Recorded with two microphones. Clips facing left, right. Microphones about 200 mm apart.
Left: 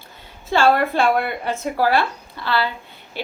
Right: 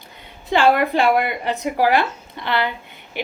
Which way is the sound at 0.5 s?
15° right (ahead or behind).